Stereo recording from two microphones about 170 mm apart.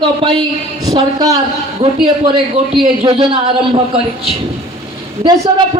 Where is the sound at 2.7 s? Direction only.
30° right (ahead or behind).